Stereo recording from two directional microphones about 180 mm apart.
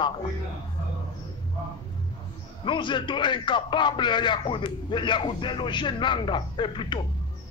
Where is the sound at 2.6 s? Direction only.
25° left (ahead or behind).